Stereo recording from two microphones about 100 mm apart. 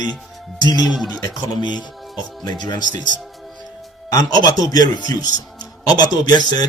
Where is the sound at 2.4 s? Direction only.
45° left (ahead or behind).